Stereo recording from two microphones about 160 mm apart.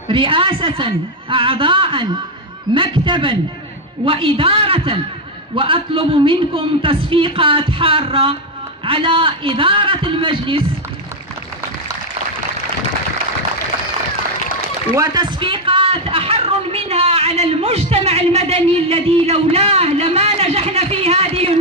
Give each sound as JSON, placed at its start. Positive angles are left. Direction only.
{"t": 0.1, "sound": "a man's voice", "side_deg": -35}
{"t": 15.0, "sound": "a man's voice", "side_deg": -25}